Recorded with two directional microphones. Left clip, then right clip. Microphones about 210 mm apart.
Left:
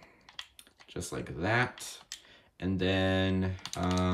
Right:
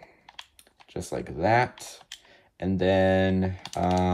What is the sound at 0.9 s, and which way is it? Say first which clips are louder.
Speech: right 6 dB; 10° left (ahead or behind).